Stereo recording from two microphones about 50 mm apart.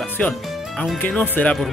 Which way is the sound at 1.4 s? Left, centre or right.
Left.